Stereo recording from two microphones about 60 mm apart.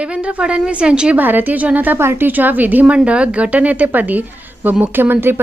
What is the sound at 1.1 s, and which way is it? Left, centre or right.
A woman's voice, right.